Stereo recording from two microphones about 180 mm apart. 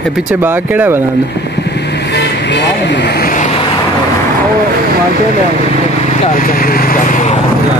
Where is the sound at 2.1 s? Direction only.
75° left (ahead or behind); by 3.4 s 55° left (ahead or behind).